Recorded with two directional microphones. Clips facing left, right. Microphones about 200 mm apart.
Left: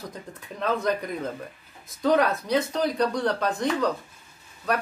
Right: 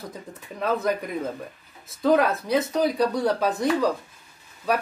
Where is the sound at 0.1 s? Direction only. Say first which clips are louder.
Right 1 dB; centre (ahead or behind).